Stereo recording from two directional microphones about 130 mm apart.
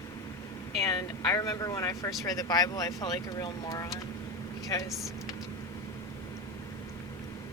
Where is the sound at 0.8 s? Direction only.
30° left (ahead or behind).